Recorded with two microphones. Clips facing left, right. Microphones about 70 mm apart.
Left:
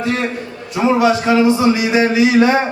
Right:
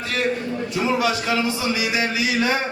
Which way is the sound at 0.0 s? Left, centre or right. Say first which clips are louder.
Left 4 dB; left.